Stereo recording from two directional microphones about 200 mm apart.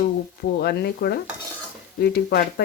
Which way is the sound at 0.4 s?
55° left (ahead or behind).